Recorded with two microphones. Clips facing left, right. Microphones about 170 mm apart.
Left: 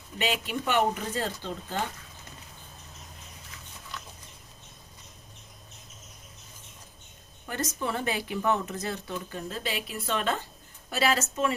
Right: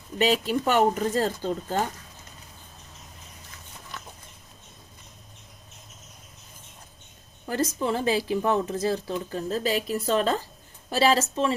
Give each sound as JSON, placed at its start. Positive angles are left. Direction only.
{"t": 0.2, "sound": "speech", "side_deg": -40}
{"t": 7.4, "sound": "speech", "side_deg": -30}
{"t": 9.3, "sound": "speech", "side_deg": -40}